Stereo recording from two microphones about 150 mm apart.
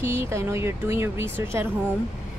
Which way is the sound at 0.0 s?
20° right (ahead or behind).